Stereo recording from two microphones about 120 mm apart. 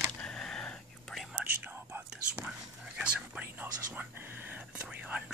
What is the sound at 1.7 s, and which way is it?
Whispering, 20° right (ahead or behind).